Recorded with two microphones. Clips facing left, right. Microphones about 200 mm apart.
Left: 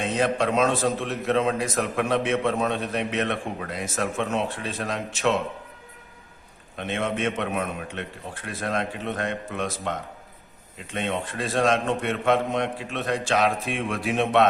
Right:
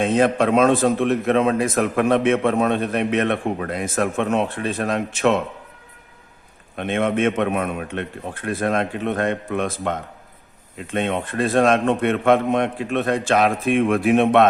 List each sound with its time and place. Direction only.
0.0 s a man's voice: 55° right (ahead or behind)
6.7 s a man's voice: 55° right (ahead or behind)